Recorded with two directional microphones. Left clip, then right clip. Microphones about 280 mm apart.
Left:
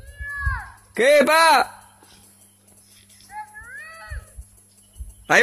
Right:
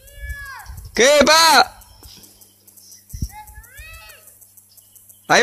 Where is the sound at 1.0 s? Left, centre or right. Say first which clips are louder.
Right 3 dB; right.